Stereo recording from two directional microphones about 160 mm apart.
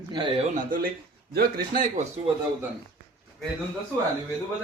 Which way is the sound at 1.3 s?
70° right (ahead or behind).